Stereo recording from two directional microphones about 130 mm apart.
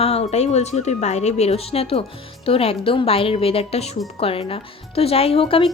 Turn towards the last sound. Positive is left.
turn(degrees=45)  # may be behind; listen again after turning